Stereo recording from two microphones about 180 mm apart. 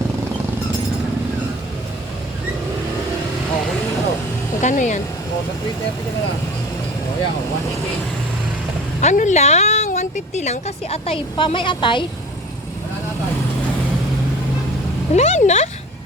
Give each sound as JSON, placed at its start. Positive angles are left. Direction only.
{"t": 4.6, "sound": "speech", "side_deg": 45}
{"t": 9.0, "sound": "speech", "side_deg": 40}
{"t": 15.1, "sound": "speech", "side_deg": 40}